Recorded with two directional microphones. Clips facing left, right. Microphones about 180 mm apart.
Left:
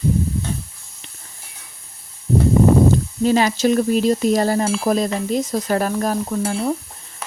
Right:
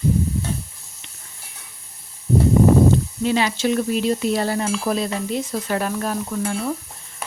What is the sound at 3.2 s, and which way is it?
Speech, 40° left (ahead or behind).